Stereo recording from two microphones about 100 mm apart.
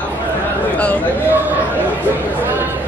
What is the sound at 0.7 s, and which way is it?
Speech, 15° left (ahead or behind).